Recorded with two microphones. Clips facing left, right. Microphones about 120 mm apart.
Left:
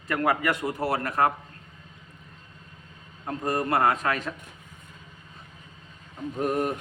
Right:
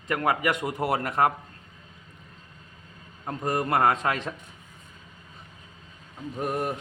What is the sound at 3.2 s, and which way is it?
Speech, 20° right (ahead or behind).